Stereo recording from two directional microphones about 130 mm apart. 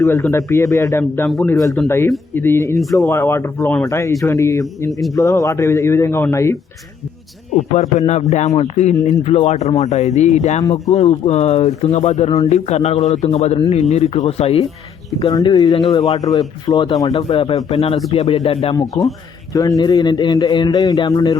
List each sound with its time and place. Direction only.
0.0 s a man's voice: 20° left (ahead or behind)
4.9 s speech: centre (ahead or behind)
5.1 s a man's voice: 25° left (ahead or behind)
7.5 s speech: 60° left (ahead or behind)
10.6 s a man's voice: 25° left (ahead or behind)
10.9 s speech: 50° left (ahead or behind)
15.4 s a man's voice: 25° left (ahead or behind)
15.9 s speech: 50° left (ahead or behind)
16.1 s a man's voice: 30° left (ahead or behind)
17.2 s speech: 40° left (ahead or behind)
19.5 s a man's voice: 25° left (ahead or behind)